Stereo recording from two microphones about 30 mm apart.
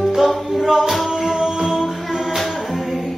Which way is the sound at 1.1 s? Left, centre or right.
Centre.